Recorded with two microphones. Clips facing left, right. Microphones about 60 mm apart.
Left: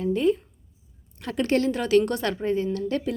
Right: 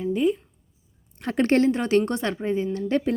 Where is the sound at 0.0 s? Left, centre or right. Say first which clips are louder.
Even; centre.